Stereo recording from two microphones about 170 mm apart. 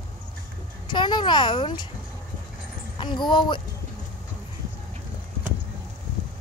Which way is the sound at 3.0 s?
25° left (ahead or behind).